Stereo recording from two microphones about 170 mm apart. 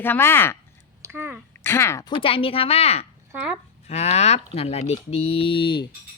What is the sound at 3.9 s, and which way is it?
Speech, 40° left (ahead or behind).